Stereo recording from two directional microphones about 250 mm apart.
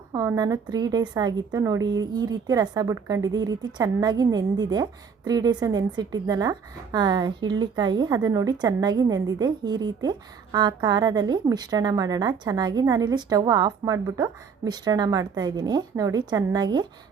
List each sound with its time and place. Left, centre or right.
0.1 s a woman's voice: centre